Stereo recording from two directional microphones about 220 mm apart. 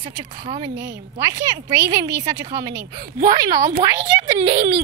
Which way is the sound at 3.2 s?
40° right (ahead or behind).